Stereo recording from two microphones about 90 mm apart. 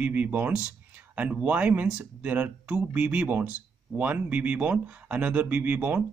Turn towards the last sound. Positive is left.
turn(degrees=-20)  # may be behind; listen again after turning